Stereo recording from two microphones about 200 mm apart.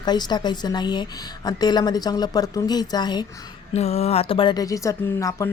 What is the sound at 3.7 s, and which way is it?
Speech, 30° left (ahead or behind).